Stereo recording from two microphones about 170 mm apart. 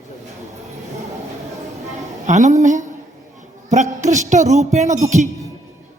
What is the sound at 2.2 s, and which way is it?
A woman's voice, 45° right (ahead or behind).